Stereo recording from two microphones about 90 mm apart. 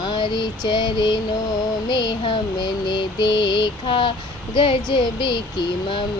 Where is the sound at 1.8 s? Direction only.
55° left (ahead or behind).